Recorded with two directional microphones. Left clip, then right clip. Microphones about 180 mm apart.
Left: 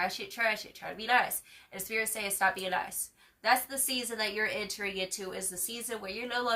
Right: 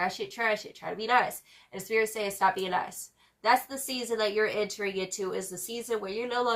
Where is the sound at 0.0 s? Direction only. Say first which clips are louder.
Right 1 dB; 15° left (ahead or behind).